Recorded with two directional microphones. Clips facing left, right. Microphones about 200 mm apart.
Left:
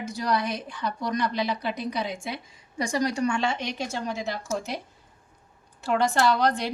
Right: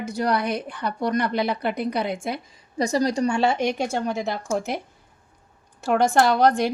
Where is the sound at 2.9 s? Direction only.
40° right (ahead or behind).